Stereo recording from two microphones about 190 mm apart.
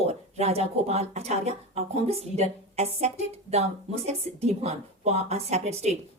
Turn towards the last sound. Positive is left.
turn(degrees=-35)  # may be behind; listen again after turning